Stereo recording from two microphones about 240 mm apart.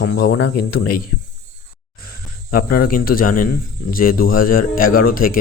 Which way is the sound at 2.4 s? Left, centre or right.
Left.